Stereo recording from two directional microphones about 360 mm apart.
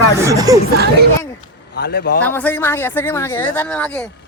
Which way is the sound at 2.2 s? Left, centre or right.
Centre.